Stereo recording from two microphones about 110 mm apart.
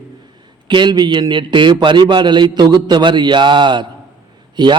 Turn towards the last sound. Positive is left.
turn(degrees=-45)  # may be behind; listen again after turning